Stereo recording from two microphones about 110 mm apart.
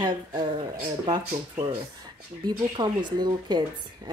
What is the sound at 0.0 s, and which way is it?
Speech, 40° right (ahead or behind).